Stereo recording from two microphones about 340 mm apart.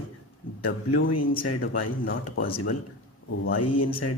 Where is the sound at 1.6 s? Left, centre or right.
Left.